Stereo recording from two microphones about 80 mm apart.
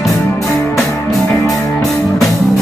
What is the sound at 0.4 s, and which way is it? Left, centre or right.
Music, centre.